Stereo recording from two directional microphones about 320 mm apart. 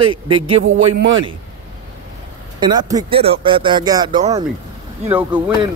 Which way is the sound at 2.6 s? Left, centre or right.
Centre.